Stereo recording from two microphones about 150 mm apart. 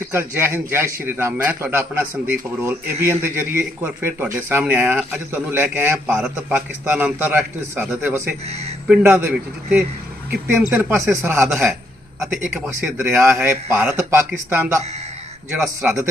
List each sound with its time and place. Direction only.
0.1 s a man's voice: 15° right (ahead or behind)
8.4 s speech: 45° right (ahead or behind)
8.9 s a man's voice: 15° right (ahead or behind)
10.5 s a man's voice: 15° right (ahead or behind)